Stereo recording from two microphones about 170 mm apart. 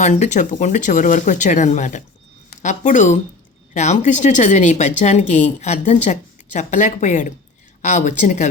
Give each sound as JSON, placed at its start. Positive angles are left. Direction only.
{"t": 0.0, "sound": "a woman's voice", "side_deg": 45}